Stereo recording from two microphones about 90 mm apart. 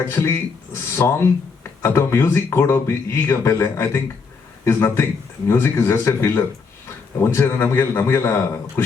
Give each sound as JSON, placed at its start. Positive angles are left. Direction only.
{"t": 0.0, "sound": "a man's voice", "side_deg": 30}